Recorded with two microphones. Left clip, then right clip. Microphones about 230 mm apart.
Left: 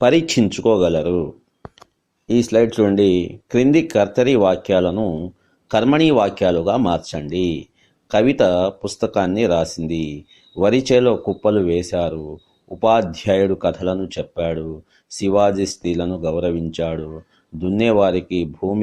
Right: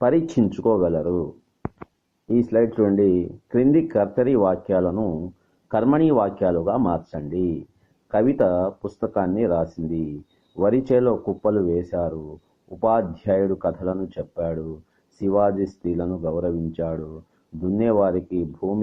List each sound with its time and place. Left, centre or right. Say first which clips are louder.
0.0 s speech: left 5 dB; left
0.3 s speech: left 4 dB; left